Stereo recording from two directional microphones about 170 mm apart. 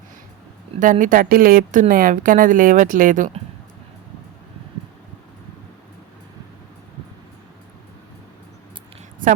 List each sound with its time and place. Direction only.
0.8 s speech: 50° right (ahead or behind)
9.2 s a woman's voice: 55° right (ahead or behind)